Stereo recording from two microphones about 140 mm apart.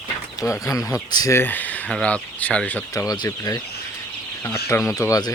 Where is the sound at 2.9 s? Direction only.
25° left (ahead or behind).